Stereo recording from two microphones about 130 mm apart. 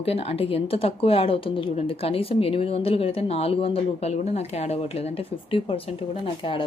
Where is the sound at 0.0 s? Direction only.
50° left (ahead or behind).